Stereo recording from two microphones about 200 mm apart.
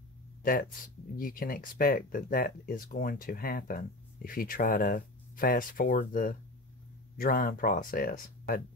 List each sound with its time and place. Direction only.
0.4 s speech: 45° left (ahead or behind)